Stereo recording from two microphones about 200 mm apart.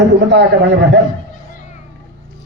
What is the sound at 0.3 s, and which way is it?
Speech, 60° right (ahead or behind).